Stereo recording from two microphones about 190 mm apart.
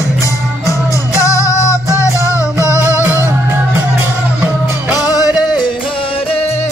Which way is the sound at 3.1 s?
10° right (ahead or behind).